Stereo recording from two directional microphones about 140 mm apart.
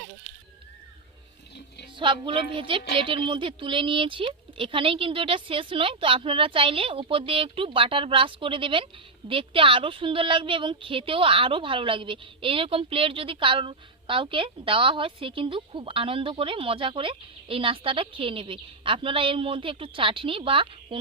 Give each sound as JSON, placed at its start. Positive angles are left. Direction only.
{"t": 2.0, "sound": "a woman's voice", "side_deg": -40}